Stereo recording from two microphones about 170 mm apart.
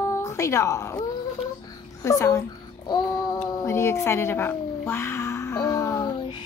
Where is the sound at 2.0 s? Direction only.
15° left (ahead or behind).